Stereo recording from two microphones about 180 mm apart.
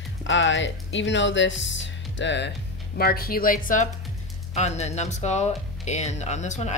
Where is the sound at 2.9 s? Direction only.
55° left (ahead or behind).